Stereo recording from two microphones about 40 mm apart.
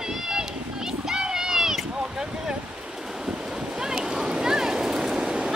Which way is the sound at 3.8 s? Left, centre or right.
Centre.